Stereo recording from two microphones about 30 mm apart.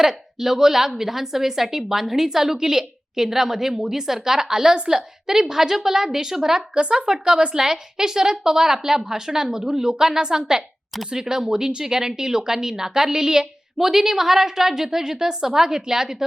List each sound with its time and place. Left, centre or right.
0.0 s a woman's voice: centre
7.1 s a woman's voice: right